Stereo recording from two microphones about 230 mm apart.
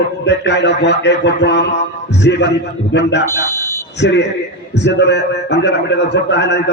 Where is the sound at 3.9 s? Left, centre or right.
Left.